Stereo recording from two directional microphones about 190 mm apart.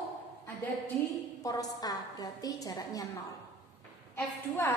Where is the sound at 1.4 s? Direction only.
20° left (ahead or behind).